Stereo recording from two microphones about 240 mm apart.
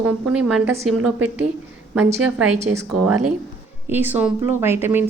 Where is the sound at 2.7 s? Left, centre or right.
Centre.